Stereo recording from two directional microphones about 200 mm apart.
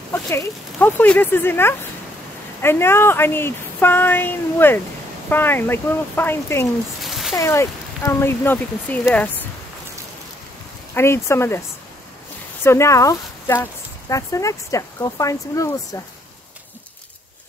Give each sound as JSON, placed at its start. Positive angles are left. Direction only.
{"t": 0.1, "sound": "speech", "side_deg": 10}
{"t": 7.0, "sound": "a sound", "side_deg": 0}
{"t": 7.3, "sound": "speech", "side_deg": 15}
{"t": 11.0, "sound": "speech", "side_deg": 15}
{"t": 12.6, "sound": "speech", "side_deg": 15}